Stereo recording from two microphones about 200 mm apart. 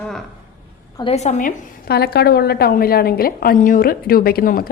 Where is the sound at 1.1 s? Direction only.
35° left (ahead or behind).